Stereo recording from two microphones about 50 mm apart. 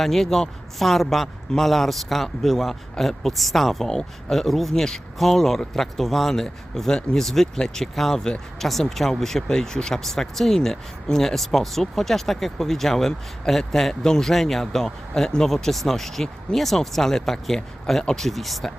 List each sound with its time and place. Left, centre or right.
0.0 s speech: centre